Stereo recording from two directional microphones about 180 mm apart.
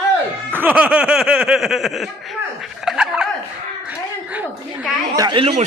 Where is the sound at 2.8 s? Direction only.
5° right (ahead or behind).